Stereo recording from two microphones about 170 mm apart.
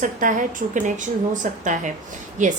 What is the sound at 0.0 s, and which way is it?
A woman's voice, 50° right (ahead or behind).